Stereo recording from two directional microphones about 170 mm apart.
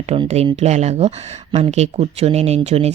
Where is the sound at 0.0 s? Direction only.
35° right (ahead or behind).